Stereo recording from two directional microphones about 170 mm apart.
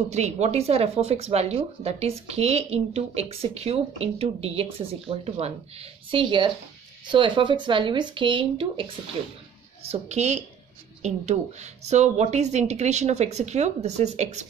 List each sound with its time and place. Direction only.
0.1 s speech: 40° right (ahead or behind)
9.8 s speech: 40° right (ahead or behind)